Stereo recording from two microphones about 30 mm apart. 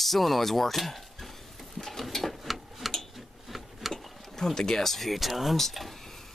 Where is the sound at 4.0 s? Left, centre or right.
Centre.